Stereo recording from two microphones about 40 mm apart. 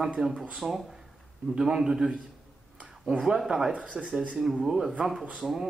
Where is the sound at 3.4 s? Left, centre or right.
Centre.